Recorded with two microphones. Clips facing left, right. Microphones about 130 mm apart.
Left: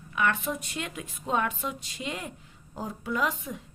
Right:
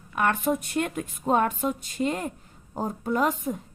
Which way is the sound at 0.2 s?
50° right (ahead or behind).